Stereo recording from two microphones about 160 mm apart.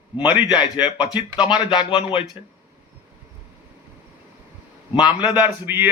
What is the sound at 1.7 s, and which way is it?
Speech, 30° left (ahead or behind).